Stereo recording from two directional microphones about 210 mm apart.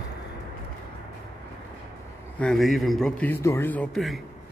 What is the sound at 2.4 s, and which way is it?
A man's voice, centre (ahead or behind).